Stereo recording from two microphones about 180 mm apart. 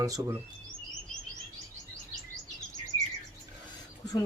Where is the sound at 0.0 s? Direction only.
15° right (ahead or behind).